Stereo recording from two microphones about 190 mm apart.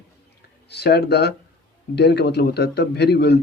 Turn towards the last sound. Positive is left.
turn(degrees=60)  # may be behind; listen again after turning